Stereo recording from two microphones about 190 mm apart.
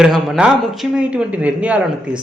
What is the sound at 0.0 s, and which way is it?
Speech, 5° right (ahead or behind).